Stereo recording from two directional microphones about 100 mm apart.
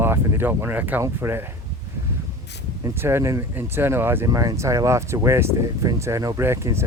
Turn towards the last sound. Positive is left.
turn(degrees=-30)  # may be behind; listen again after turning